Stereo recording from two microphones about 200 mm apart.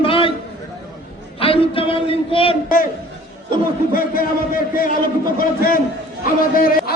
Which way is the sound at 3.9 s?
45° left (ahead or behind).